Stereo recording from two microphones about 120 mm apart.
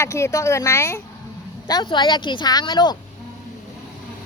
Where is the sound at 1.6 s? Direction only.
35° left (ahead or behind).